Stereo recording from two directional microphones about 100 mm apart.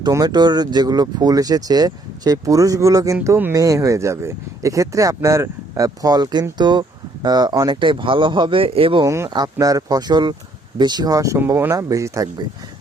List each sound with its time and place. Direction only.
0.1 s speech: 40° right (ahead or behind)
7.7 s speech: 55° right (ahead or behind)
9.0 s speech: 25° right (ahead or behind)
9.3 s speech: 40° right (ahead or behind)
11.3 s speech: 25° right (ahead or behind)